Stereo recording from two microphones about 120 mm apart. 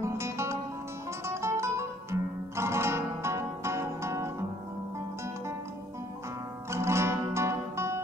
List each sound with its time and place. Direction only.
0.0 s music: 25° right (ahead or behind)
6.7 s music: 20° right (ahead or behind)